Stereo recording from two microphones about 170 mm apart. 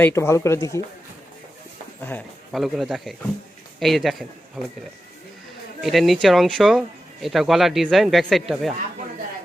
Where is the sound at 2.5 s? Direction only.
Centre (ahead or behind).